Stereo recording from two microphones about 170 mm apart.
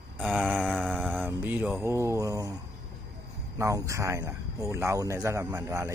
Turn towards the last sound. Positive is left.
turn(degrees=-15)  # may be behind; listen again after turning